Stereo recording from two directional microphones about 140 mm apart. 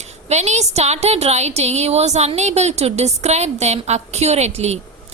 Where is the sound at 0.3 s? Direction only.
55° right (ahead or behind).